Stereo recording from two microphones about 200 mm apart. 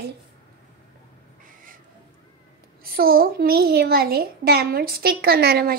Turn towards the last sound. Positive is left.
turn(degrees=-50)  # may be behind; listen again after turning